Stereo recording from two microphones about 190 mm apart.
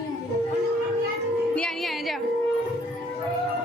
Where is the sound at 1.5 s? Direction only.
Centre (ahead or behind).